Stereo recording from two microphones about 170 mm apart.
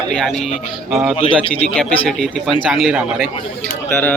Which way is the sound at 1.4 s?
35° left (ahead or behind).